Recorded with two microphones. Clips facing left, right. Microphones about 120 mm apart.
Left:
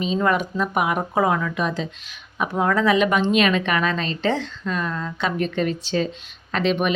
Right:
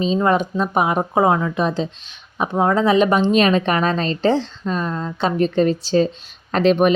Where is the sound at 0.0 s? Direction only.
30° right (ahead or behind).